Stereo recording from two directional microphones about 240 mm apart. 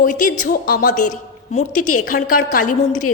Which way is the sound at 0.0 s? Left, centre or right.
Left.